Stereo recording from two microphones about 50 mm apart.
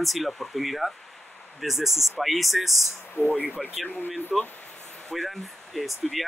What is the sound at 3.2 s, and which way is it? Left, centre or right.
Speech, left.